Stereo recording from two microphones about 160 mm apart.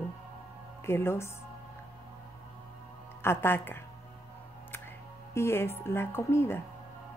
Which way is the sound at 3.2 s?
15° left (ahead or behind).